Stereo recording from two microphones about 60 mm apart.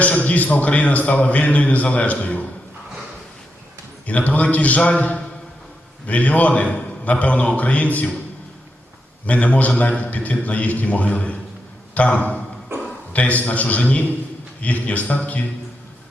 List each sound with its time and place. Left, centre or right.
0.0 s a man's voice: left
4.0 s a man's voice: left
9.2 s a man's voice: left
12.7 s a sound: right
13.1 s a man's voice: left